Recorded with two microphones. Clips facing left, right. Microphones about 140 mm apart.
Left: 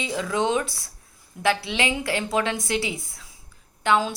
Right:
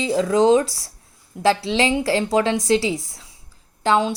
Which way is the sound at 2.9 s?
90° right.